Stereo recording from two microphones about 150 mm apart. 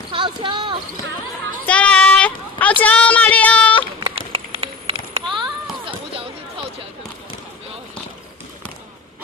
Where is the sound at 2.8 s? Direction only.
10° left (ahead or behind).